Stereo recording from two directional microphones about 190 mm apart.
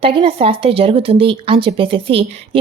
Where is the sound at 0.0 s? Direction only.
30° right (ahead or behind).